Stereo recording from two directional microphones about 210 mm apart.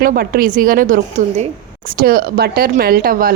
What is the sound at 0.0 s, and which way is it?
Speech, 45° right (ahead or behind).